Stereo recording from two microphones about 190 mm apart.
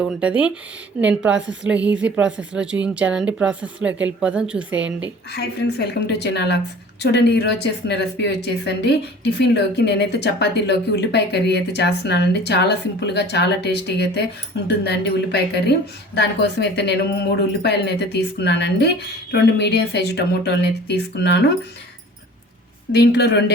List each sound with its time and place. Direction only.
0.0 s a woman's voice: 5° right (ahead or behind)
5.3 s speech: 60° left (ahead or behind)
22.9 s speech: 60° left (ahead or behind)